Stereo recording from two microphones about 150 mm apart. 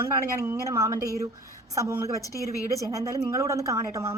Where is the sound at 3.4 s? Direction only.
20° right (ahead or behind).